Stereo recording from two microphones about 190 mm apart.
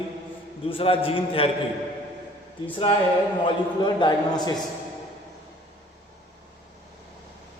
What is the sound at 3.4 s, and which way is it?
A man's voice, 25° left (ahead or behind).